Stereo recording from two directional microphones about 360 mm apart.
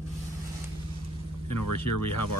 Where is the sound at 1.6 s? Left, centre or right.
Left.